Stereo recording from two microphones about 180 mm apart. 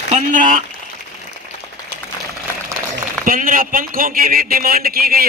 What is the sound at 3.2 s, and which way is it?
A man's voice, 50° right (ahead or behind).